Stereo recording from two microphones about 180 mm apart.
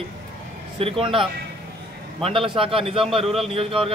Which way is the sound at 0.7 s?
30° right (ahead or behind).